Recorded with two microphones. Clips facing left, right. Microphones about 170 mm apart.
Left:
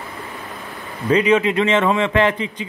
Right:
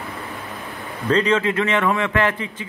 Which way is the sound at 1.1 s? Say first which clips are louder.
Left 3 dB; 10° left (ahead or behind).